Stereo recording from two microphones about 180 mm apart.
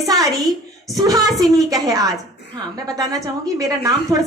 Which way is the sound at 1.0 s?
20° right (ahead or behind).